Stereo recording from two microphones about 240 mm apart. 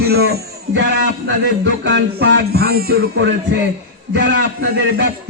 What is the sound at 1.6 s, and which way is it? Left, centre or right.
Music, right.